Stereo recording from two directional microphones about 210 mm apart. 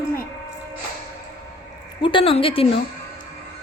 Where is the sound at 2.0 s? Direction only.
25° left (ahead or behind).